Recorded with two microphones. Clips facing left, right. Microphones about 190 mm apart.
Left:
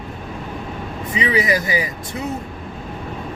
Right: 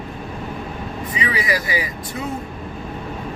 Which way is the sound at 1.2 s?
25° left (ahead or behind).